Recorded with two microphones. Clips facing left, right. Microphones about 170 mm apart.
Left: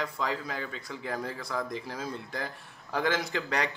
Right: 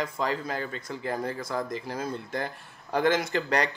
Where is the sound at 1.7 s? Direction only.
Centre (ahead or behind).